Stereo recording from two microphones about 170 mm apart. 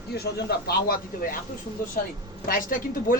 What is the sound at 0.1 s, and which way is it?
Speech, 60° left (ahead or behind).